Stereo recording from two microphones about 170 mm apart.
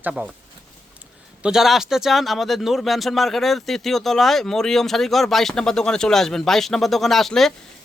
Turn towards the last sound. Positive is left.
turn(degrees=0)  # may be behind; listen again after turning